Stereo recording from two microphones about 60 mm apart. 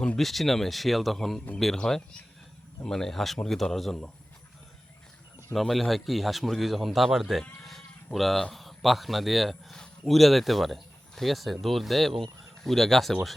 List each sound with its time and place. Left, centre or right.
0.2 s speech: centre
5.5 s speech: centre
9.7 s a sound: centre
10.1 s speech: centre